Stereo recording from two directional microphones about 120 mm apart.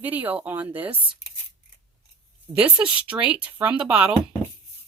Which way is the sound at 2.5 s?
10° right (ahead or behind).